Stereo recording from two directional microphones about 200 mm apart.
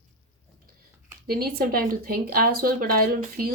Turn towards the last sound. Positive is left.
turn(degrees=-45)  # may be behind; listen again after turning